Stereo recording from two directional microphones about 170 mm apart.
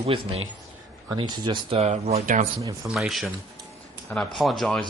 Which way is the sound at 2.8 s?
Centre (ahead or behind).